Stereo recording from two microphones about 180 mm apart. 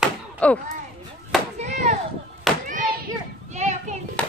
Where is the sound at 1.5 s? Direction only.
40° right (ahead or behind).